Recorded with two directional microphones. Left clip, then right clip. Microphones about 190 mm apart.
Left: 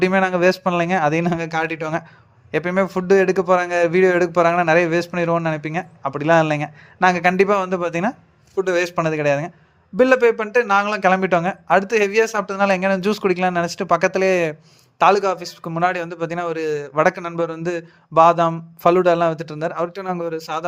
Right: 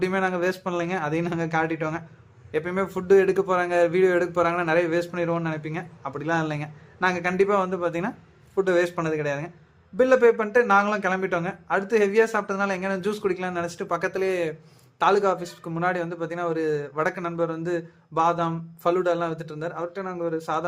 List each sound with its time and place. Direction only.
0.0 s a man's voice: 40° left (ahead or behind)